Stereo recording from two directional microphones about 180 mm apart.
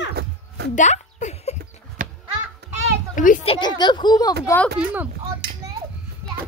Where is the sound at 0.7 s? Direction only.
40° left (ahead or behind).